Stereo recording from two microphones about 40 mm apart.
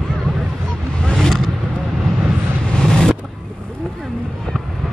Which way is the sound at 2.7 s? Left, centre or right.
Centre.